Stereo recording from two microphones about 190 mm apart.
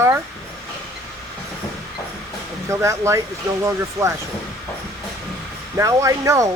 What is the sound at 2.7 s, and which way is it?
Speech, 15° right (ahead or behind).